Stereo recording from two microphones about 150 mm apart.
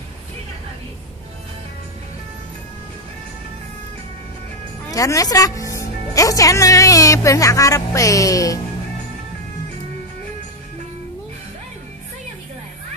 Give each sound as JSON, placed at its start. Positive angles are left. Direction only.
{"t": 4.9, "sound": "speech", "side_deg": 20}